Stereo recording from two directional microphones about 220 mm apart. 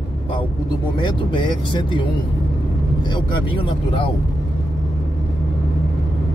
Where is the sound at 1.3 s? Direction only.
20° left (ahead or behind).